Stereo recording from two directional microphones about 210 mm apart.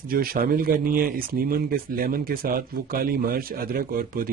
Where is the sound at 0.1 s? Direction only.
45° right (ahead or behind).